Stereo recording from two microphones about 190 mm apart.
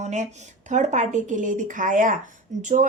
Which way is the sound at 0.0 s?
40° right (ahead or behind).